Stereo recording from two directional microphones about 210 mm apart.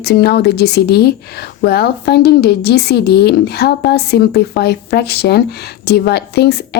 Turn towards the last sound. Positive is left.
turn(degrees=50)  # may be behind; listen again after turning